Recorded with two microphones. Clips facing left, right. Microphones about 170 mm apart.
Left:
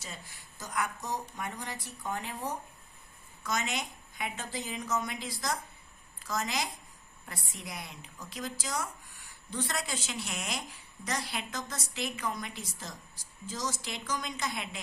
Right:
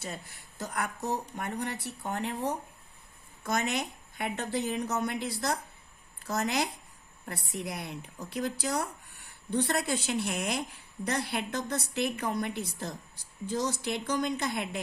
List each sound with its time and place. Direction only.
0.0 s a woman's voice: 60° right (ahead or behind)